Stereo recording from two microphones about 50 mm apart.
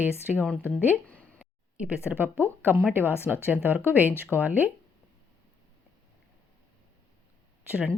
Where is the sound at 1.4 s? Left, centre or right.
Right.